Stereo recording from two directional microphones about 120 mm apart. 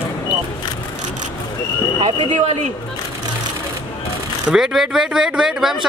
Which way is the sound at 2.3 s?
85° right.